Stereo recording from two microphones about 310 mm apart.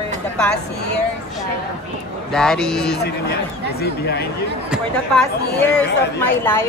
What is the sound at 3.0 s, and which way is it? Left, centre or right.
Speech, left.